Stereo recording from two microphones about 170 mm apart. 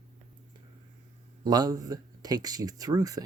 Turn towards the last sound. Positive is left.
turn(degrees=-20)  # may be behind; listen again after turning